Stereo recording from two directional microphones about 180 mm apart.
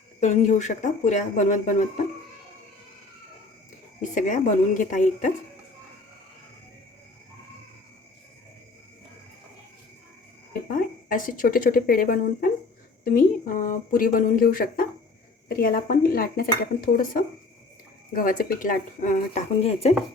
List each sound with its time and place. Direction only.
0.2 s speech: 40° left (ahead or behind)
4.1 s speech: 45° left (ahead or behind)
10.7 s speech: 50° left (ahead or behind)